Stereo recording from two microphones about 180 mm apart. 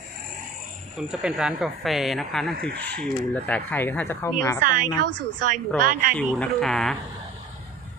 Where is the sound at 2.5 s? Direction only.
60° right (ahead or behind).